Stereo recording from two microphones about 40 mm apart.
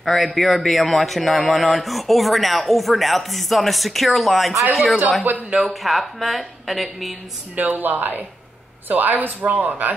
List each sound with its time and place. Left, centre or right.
0.0 s speech: centre
5.3 s speech: right
5.7 s speech: centre
7.5 s speech: right